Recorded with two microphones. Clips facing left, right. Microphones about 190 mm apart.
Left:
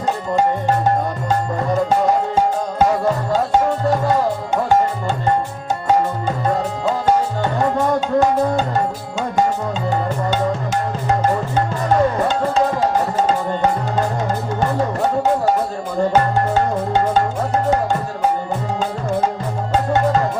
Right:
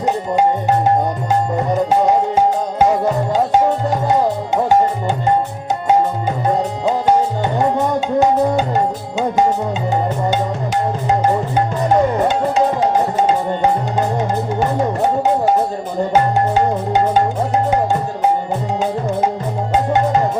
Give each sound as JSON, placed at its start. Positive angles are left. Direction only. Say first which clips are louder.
{"t": 2.3, "sound": "music", "louder": "right 2 dB", "side_deg": -15}
{"t": 11.1, "sound": "music", "louder": "right 1 dB", "side_deg": -20}
{"t": 16.6, "sound": "music", "louder": "right 2 dB", "side_deg": -15}
{"t": 19.7, "sound": "music", "louder": "right 1 dB", "side_deg": -15}